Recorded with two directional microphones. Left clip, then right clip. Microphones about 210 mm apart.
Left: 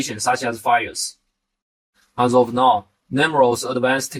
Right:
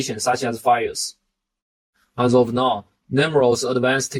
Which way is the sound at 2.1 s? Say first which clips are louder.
Left 1 dB; 30° right (ahead or behind).